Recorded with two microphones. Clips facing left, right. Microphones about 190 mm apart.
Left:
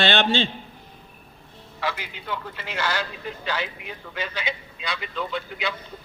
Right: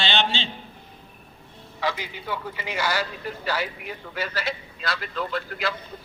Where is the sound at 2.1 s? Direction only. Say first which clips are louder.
Right 1 dB; 10° right (ahead or behind).